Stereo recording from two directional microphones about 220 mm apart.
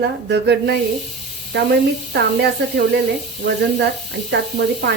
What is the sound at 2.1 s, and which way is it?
Speech, 50° right (ahead or behind).